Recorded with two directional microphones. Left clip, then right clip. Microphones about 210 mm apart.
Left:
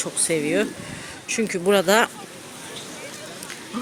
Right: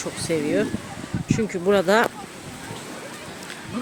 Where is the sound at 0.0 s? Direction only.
10° left (ahead or behind).